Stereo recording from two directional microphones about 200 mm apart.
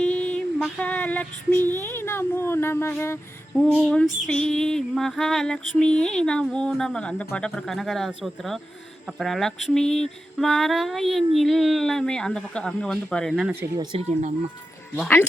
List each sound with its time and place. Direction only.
0.0 s female singing: 5° left (ahead or behind)
1.8 s speech: 10° left (ahead or behind)
3.8 s female singing: centre (ahead or behind)
13.9 s speech: 35° right (ahead or behind)
14.9 s female singing: 5° left (ahead or behind)